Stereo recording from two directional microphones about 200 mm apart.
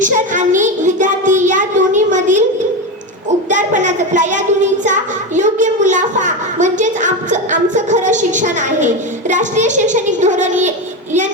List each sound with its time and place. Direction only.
0.0 s child singing: 40° right (ahead or behind)
3.5 s a child's voice: 40° right (ahead or behind)